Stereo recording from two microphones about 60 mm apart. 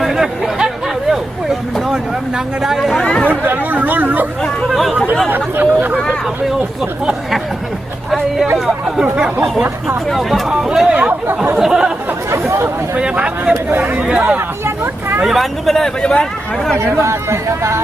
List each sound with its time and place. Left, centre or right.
0.0 s chatter: centre
1.1 s vehicle: centre
2.6 s speech: centre
2.9 s speech: centre
3.2 s speech: right
5.3 s speech: right
8.5 s speech: centre
10.1 s speech: centre
12.3 s chatter: right
13.0 s speech: centre
13.7 s speech: right
15.2 s speech: centre
16.7 s speech: right